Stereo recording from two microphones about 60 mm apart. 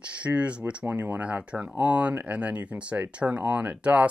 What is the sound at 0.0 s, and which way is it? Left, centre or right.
Speech, right.